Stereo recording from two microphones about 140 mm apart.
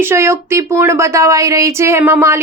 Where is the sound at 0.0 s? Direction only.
20° right (ahead or behind).